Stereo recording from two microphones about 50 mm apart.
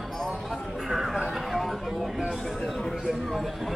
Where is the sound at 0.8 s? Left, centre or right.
Centre.